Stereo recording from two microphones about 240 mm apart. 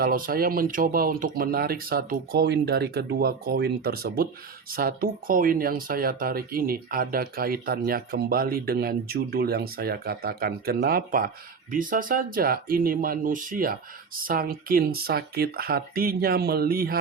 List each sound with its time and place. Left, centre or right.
0.0 s speech: right